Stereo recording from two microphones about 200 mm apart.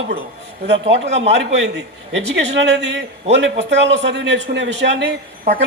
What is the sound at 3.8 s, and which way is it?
Speech, 60° right (ahead or behind).